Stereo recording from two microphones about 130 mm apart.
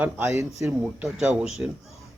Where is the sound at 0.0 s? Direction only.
20° right (ahead or behind).